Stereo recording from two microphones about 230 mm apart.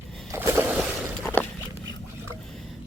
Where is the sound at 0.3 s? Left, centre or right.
Centre.